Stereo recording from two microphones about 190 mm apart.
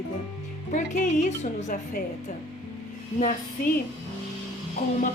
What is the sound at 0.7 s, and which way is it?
A woman's voice, 40° left (ahead or behind).